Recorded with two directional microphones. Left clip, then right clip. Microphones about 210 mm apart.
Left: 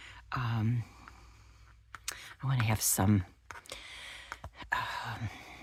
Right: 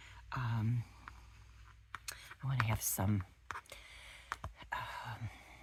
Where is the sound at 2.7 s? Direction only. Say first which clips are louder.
Left 8 dB; 35° left (ahead or behind).